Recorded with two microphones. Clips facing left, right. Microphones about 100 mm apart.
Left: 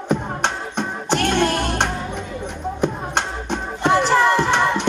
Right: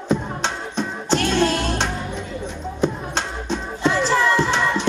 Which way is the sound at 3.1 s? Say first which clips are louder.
Left 2 dB; 60° left (ahead or behind).